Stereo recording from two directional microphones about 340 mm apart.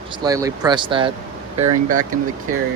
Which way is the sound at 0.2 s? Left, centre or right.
Centre.